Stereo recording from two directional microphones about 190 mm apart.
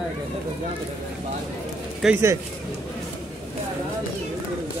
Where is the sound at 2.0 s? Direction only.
10° right (ahead or behind).